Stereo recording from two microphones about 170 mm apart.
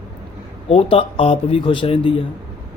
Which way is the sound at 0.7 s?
35° left (ahead or behind).